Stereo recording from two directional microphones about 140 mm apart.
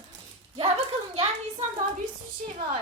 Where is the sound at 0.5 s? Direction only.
50° right (ahead or behind).